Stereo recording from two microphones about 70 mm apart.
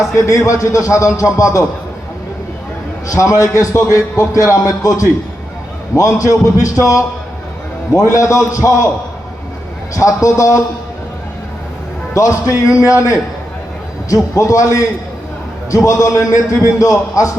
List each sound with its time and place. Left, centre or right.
0.2 s speech: left
3.1 s speech: left
9.9 s speech: left
12.1 s speech: left
14.3 s speech: left